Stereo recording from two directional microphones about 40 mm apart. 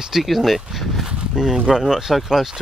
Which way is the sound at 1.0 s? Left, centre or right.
Centre.